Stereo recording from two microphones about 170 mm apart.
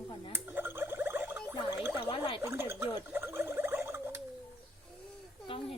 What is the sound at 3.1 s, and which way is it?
Gargling, 15° right (ahead or behind).